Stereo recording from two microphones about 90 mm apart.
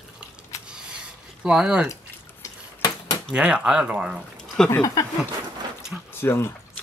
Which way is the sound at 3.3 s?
10° right (ahead or behind).